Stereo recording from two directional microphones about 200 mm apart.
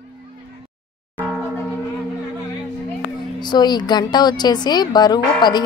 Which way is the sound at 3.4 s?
20° left (ahead or behind).